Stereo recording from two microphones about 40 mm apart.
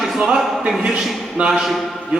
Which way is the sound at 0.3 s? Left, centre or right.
Centre.